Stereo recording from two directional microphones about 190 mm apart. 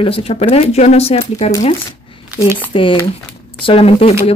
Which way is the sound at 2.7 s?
25° left (ahead or behind).